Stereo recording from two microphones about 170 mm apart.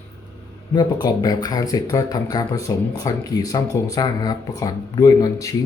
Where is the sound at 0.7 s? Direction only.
25° left (ahead or behind).